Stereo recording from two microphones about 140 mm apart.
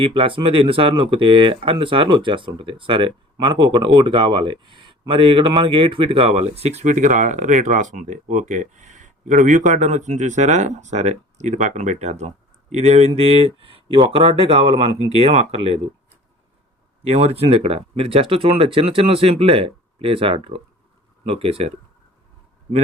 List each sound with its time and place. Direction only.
0.0 s speech: 40° right (ahead or behind)
17.0 s speech: 45° right (ahead or behind)